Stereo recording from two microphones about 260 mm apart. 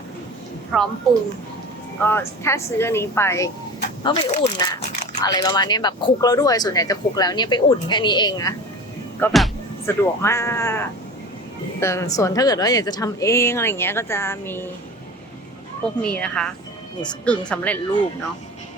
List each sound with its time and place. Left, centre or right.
0.7 s speech: centre
2.0 s speech: centre
9.2 s music: centre
10.2 s speech: centre
16.0 s speech: centre